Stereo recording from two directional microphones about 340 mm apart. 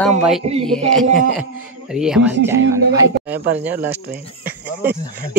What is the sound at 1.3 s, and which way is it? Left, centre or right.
Speech, centre.